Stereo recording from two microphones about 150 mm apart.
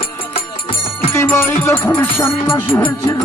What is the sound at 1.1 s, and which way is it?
Music, 15° left (ahead or behind).